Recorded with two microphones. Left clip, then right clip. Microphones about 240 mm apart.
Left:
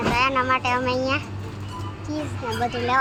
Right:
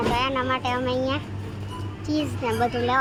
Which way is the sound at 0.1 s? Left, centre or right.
Centre.